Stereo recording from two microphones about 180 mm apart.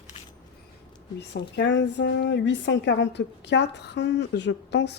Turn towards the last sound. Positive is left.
turn(degrees=70)  # may be behind; listen again after turning